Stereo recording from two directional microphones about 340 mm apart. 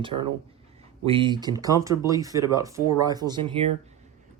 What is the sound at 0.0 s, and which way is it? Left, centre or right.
Speech, centre.